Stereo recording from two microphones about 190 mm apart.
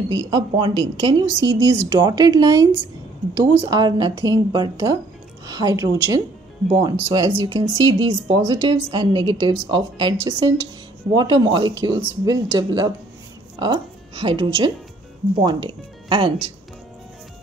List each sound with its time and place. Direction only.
0.1 s a woman's voice: 20° right (ahead or behind)